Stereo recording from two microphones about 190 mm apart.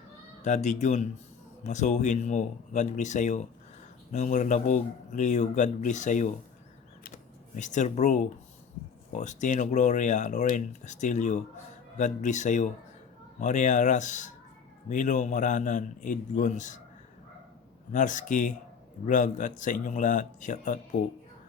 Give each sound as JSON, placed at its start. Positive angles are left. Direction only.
{"t": 0.4, "sound": "speech", "side_deg": 40}
{"t": 7.5, "sound": "speech", "side_deg": 40}
{"t": 17.9, "sound": "speech", "side_deg": 40}